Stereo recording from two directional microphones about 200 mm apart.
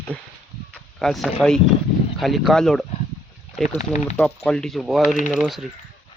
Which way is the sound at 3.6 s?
35° left (ahead or behind).